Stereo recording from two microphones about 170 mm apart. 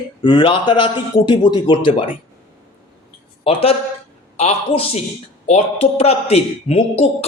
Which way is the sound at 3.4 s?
35° left (ahead or behind).